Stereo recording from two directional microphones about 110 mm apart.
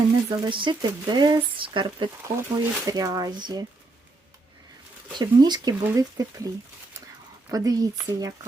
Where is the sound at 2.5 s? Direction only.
35° right (ahead or behind).